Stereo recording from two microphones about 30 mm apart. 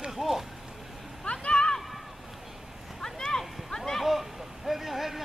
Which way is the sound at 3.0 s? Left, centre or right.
Left.